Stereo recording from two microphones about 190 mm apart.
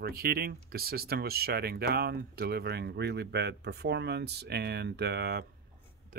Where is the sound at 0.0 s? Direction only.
50° right (ahead or behind).